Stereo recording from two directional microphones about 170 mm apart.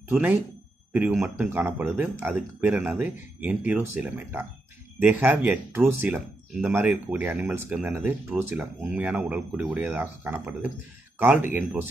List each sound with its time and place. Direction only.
0.1 s speech: 10° right (ahead or behind)